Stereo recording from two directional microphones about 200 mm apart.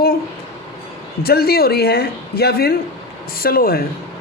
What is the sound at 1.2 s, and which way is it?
A woman's voice, 50° left (ahead or behind).